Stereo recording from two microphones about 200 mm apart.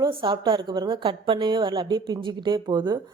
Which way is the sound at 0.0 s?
25° right (ahead or behind).